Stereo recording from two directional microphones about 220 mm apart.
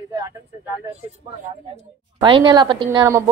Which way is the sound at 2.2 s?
20° right (ahead or behind).